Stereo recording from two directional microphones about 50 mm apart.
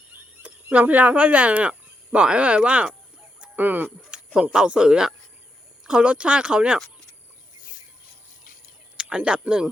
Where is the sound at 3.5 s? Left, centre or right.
Right.